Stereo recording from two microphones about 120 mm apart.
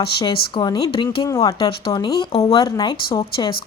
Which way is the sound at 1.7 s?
45° left (ahead or behind).